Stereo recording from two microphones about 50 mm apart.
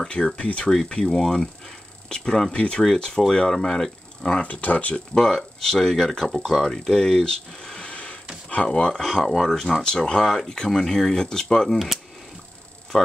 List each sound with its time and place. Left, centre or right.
0.0 s speech: centre
4.4 s speech: left
4.9 s speech: centre
12.9 s speech: centre